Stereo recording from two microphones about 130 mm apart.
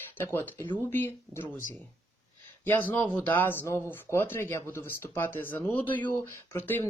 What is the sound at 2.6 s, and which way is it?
Speech, 15° left (ahead or behind).